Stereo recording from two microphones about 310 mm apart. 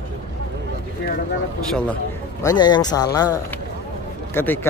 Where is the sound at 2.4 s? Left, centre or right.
Centre.